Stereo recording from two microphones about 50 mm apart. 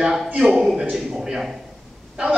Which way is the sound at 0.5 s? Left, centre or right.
Centre.